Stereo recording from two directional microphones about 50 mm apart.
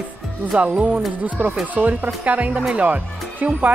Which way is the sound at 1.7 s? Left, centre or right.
Right.